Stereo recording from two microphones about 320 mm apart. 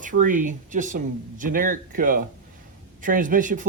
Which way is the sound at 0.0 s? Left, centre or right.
Right.